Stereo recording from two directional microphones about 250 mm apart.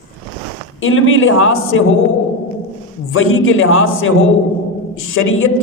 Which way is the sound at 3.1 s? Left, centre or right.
Left.